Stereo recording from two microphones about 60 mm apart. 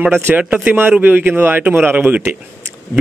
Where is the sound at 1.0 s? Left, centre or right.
Right.